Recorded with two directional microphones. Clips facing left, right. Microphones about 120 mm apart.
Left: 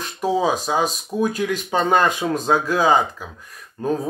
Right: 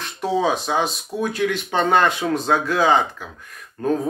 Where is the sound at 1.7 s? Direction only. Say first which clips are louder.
Even; 15° left (ahead or behind).